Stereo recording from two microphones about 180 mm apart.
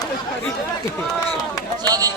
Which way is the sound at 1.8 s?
20° right (ahead or behind).